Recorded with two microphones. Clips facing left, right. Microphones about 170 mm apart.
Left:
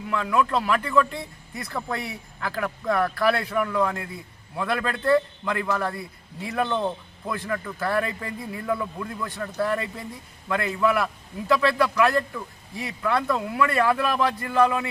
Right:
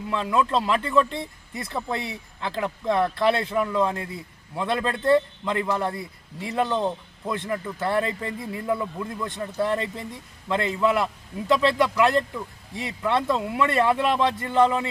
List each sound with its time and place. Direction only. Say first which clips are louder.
0.1 s a man's voice: even; 25° right (ahead or behind)